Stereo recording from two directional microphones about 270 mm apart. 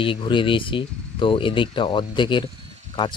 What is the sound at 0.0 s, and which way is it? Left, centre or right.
Speech, centre.